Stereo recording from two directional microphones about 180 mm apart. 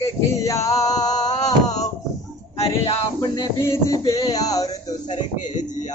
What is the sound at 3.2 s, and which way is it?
Speech, 20° left (ahead or behind).